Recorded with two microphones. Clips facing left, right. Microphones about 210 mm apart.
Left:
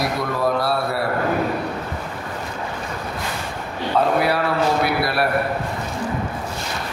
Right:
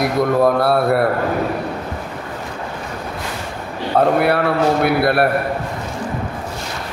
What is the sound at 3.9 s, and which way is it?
A man's voice, 55° right (ahead or behind).